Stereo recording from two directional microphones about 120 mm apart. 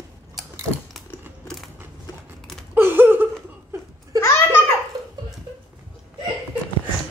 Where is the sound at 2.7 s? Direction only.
15° right (ahead or behind).